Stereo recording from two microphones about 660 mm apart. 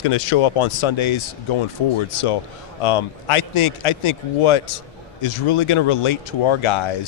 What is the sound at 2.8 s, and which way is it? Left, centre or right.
Speech, left.